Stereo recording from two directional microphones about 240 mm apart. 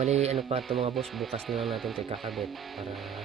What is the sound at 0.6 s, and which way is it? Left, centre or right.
Speech, centre.